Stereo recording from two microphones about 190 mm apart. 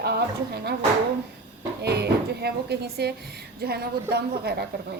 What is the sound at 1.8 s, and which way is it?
A woman's voice, 60° right (ahead or behind).